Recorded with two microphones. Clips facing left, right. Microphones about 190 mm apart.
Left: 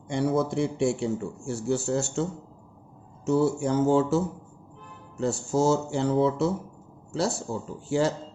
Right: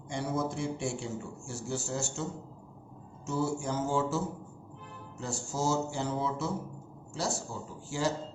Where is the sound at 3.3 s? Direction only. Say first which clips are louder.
Left 9 dB; 60° left (ahead or behind).